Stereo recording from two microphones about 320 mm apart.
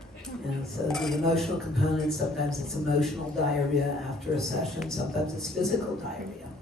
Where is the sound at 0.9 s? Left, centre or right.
Centre.